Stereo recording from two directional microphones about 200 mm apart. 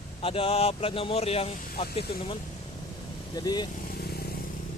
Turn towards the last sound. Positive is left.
turn(degrees=50)  # may be behind; listen again after turning